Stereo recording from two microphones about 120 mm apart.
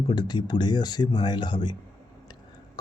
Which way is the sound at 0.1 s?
35° left (ahead or behind).